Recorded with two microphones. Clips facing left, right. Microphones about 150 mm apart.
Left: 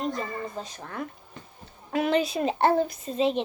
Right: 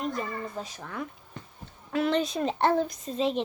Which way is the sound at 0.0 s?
35° left (ahead or behind).